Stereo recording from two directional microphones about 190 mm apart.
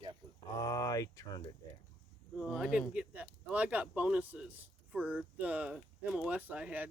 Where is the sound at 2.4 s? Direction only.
Centre (ahead or behind).